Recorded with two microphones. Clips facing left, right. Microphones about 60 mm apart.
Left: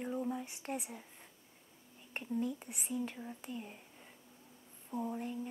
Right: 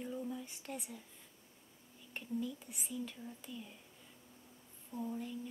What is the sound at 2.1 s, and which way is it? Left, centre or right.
Speech, left.